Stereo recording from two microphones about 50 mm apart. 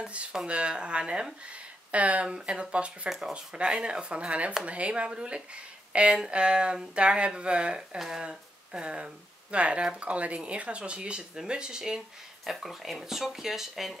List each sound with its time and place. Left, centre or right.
0.0 s speech: right
3.1 s speech: centre
12.4 s speech: centre